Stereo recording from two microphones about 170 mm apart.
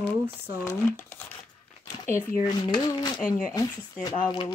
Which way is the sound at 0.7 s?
15° left (ahead or behind).